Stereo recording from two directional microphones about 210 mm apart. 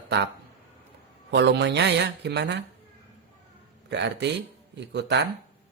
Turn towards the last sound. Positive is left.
turn(degrees=-55)  # may be behind; listen again after turning